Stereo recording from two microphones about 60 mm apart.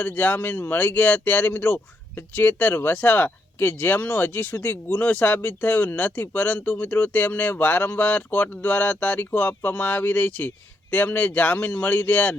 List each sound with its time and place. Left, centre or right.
0.0 s speech: left